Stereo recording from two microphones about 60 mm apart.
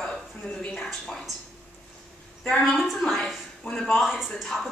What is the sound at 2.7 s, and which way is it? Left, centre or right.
Speech, centre.